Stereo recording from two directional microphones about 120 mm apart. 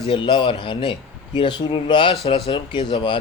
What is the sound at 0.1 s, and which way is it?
Speech, 45° left (ahead or behind).